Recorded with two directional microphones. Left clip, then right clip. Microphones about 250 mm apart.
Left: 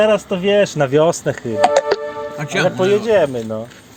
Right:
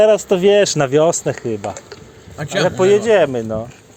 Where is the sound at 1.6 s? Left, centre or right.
Left.